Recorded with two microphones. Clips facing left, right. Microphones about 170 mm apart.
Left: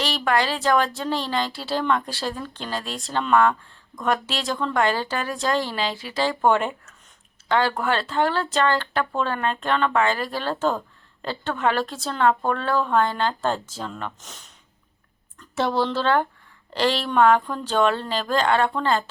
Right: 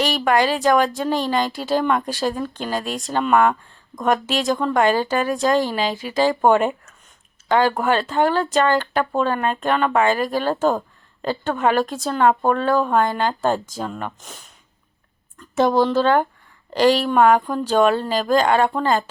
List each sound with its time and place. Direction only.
0.0 s speech: 15° right (ahead or behind)
7.4 s a sound: 15° right (ahead or behind)
7.8 s speech: 15° right (ahead or behind)
15.8 s speech: 15° right (ahead or behind)